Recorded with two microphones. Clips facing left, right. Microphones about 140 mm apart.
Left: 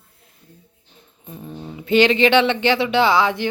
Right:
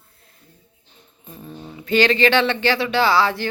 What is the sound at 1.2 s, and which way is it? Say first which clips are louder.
Speech: left 3 dB; 20° left (ahead or behind).